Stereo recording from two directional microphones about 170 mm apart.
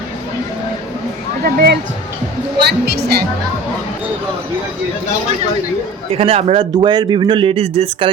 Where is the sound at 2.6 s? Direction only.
75° right (ahead or behind).